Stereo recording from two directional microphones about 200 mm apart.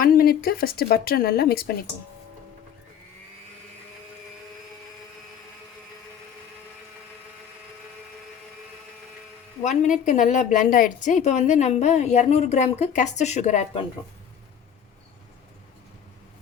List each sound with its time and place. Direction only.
0.0 s speech: 45° left (ahead or behind)
9.6 s a woman's voice: 40° left (ahead or behind)